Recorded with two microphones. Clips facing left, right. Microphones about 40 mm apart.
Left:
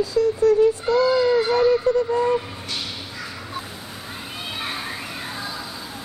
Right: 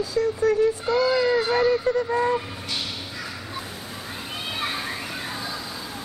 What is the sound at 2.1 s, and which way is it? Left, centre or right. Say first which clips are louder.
Speech: left 2 dB; right.